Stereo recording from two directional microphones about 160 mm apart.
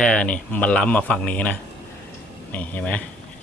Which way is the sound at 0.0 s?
5° left (ahead or behind).